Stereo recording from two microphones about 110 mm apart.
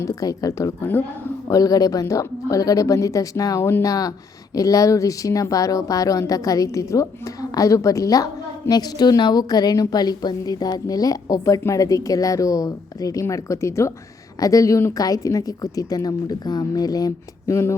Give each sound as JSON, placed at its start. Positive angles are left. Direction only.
{"t": 0.0, "sound": "a woman's voice", "side_deg": 30}
{"t": 4.5, "sound": "a woman's voice", "side_deg": 30}